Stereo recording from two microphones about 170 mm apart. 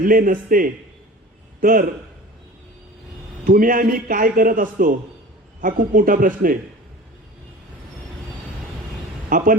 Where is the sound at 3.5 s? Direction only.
55° right (ahead or behind).